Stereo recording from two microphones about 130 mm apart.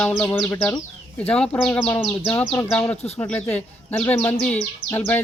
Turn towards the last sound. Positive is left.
turn(degrees=15)  # may be behind; listen again after turning